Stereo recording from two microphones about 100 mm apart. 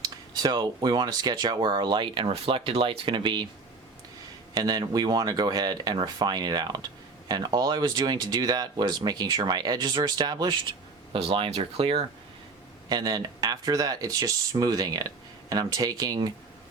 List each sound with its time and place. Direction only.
0.0 s speech: 45° right (ahead or behind)
4.5 s speech: 40° right (ahead or behind)
11.1 s speech: 70° right (ahead or behind)
12.9 s speech: 40° right (ahead or behind)